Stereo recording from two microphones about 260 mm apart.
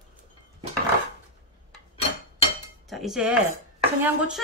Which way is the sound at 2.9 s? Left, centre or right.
Centre.